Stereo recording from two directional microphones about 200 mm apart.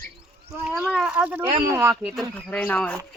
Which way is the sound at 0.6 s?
5° right (ahead or behind).